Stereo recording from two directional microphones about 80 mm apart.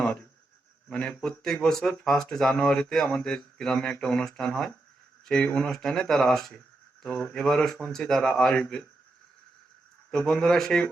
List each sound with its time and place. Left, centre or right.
0.9 s a man's voice: centre
10.1 s speech: centre